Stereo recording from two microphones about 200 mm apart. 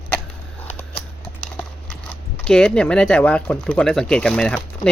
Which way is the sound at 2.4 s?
5° left (ahead or behind).